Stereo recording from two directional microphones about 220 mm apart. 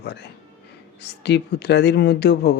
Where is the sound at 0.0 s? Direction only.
50° left (ahead or behind).